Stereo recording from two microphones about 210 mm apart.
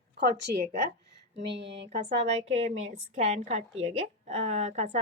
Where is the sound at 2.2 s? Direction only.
30° right (ahead or behind).